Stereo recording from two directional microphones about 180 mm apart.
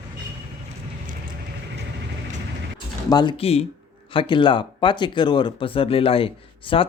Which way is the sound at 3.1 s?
25° left (ahead or behind).